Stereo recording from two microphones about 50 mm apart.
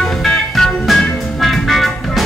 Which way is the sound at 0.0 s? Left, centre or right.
Centre.